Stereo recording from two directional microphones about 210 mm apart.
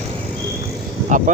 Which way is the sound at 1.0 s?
35° right (ahead or behind).